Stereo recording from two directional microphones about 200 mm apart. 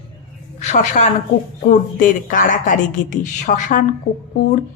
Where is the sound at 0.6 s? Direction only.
35° left (ahead or behind).